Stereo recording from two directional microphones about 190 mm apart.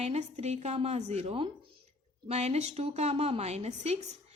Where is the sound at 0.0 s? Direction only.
35° right (ahead or behind).